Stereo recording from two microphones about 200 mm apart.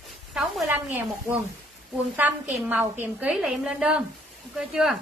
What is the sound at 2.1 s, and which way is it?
A woman's voice, 10° right (ahead or behind).